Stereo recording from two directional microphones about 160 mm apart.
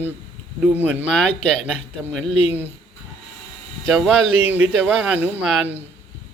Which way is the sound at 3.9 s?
Centre (ahead or behind).